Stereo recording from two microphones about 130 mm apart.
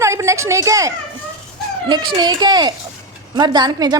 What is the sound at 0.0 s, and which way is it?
A woman's voice, 25° right (ahead or behind).